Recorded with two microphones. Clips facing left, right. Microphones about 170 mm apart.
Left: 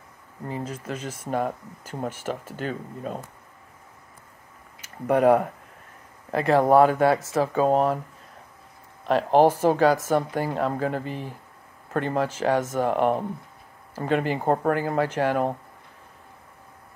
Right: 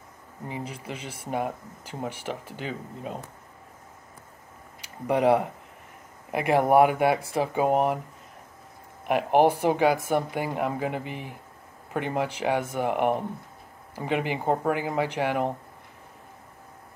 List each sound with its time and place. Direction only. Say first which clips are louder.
0.7 s speech: left 4 dB; 10° right (ahead or behind)
5.0 s speech: left 3 dB; 15° right (ahead or behind)
9.0 s speech: left 2 dB; 15° right (ahead or behind)